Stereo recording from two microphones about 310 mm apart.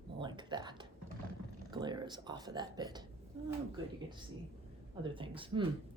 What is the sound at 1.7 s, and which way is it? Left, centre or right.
Speech, centre.